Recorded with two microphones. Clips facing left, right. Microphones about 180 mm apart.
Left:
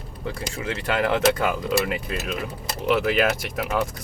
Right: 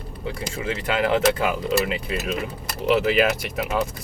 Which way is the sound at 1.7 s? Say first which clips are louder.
Right 1 dB; 20° right (ahead or behind).